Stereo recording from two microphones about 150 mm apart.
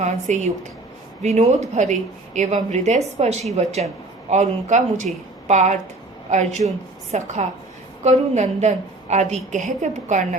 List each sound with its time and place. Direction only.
0.0 s a woman's voice: 50° right (ahead or behind)